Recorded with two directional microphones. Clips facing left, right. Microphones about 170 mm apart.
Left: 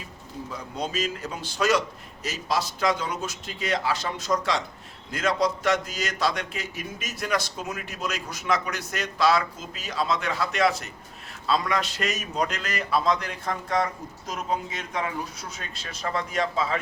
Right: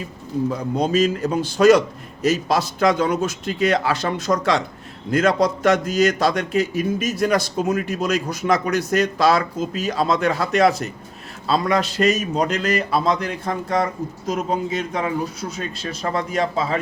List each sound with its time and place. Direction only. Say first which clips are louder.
0.5 s a man's voice: right 8 dB; 45° right (ahead or behind)
2.7 s a man's voice: right 8 dB; 60° right (ahead or behind); by 16.7 s 35° right (ahead or behind)